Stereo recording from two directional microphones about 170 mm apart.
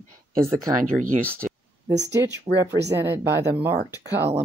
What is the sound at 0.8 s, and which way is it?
Speech, 50° right (ahead or behind).